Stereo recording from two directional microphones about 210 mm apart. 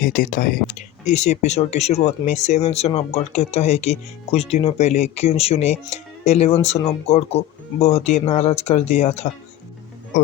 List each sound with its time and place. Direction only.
0.0 s speech: 40° left (ahead or behind)